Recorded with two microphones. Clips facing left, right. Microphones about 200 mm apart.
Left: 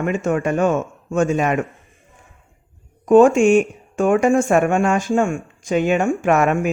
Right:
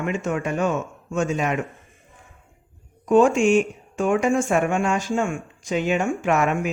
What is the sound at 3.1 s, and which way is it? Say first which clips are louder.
Speech: left 5 dB; 50° left (ahead or behind).